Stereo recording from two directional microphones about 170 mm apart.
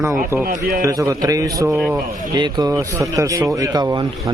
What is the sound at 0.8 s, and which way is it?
A man's voice, 20° right (ahead or behind).